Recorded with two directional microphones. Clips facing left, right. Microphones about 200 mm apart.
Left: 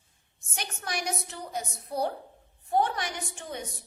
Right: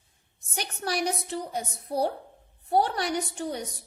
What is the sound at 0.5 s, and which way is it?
A woman's voice, 35° right (ahead or behind).